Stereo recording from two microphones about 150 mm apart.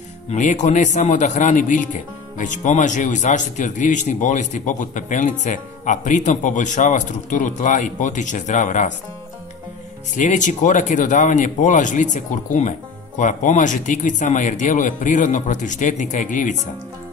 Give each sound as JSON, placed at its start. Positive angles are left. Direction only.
{"t": 0.3, "sound": "a man's voice", "side_deg": 55}
{"t": 10.1, "sound": "a man's voice", "side_deg": 55}